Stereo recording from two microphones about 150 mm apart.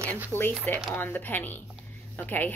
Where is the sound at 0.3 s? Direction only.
15° left (ahead or behind).